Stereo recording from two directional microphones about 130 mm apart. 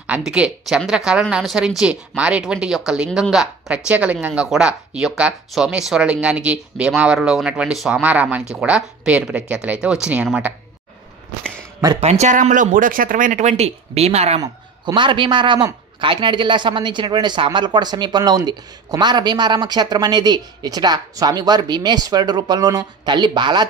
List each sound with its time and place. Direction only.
0.0 s speech: 10° right (ahead or behind)
12.0 s speech: 55° right (ahead or behind)
15.0 s a man's voice: 40° right (ahead or behind)